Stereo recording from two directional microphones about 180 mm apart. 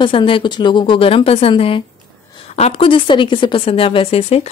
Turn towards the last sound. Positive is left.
turn(degrees=35)  # may be behind; listen again after turning